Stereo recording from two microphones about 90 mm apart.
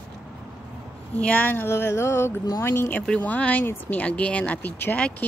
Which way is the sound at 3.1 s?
15° left (ahead or behind).